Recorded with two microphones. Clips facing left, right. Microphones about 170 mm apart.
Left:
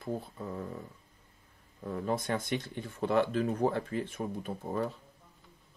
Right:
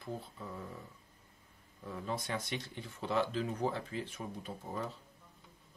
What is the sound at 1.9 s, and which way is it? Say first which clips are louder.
Speech: left 7 dB; 50° left (ahead or behind).